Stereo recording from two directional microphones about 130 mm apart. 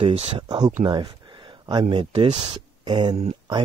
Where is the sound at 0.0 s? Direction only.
45° right (ahead or behind).